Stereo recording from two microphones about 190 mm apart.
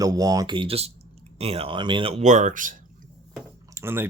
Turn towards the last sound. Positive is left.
turn(degrees=-15)  # may be behind; listen again after turning